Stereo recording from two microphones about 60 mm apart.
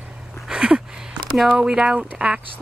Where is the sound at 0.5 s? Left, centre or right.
Centre.